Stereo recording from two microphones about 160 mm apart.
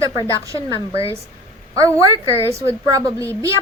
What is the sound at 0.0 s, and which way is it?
A woman's voice, 20° right (ahead or behind).